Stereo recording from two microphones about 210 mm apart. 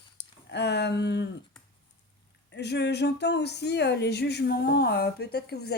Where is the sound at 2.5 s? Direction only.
55° left (ahead or behind).